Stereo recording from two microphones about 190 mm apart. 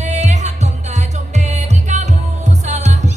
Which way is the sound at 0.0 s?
35° right (ahead or behind).